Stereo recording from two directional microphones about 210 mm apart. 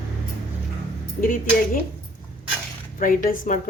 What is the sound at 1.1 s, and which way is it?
Speech, 40° left (ahead or behind).